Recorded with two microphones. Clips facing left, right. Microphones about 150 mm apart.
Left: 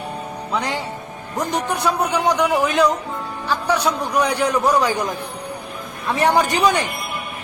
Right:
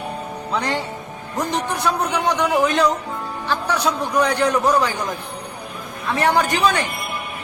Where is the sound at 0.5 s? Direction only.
10° left (ahead or behind).